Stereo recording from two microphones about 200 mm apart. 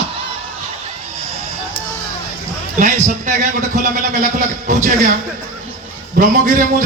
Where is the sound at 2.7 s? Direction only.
40° right (ahead or behind).